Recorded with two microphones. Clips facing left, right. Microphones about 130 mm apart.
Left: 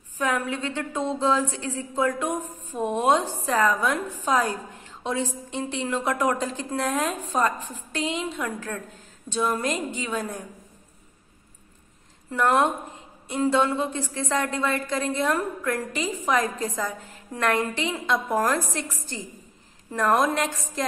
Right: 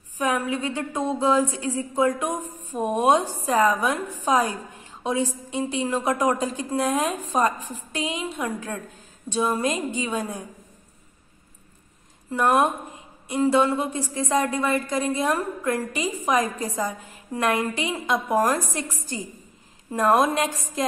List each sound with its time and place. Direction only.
0.2 s a woman's voice: 15° right (ahead or behind)
13.3 s a woman's voice: 5° right (ahead or behind)